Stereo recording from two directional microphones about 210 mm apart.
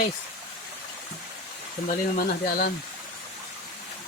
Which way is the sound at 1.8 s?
40° left (ahead or behind).